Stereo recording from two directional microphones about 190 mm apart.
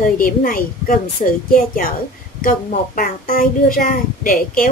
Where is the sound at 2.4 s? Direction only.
45° left (ahead or behind).